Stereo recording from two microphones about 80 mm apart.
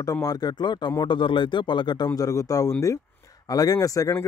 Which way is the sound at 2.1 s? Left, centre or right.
Left.